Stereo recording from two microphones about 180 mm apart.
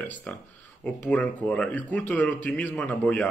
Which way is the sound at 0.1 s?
Centre (ahead or behind).